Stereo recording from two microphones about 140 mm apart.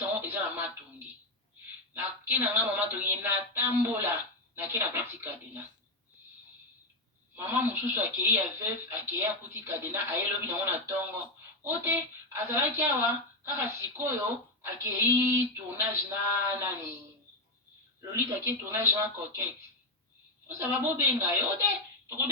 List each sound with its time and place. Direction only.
0.0 s a sound: 15° right (ahead or behind)
1.9 s speech: 15° right (ahead or behind)
7.3 s speech: 15° right (ahead or behind)
18.1 s speech: 20° right (ahead or behind)
20.5 s speech: 15° right (ahead or behind)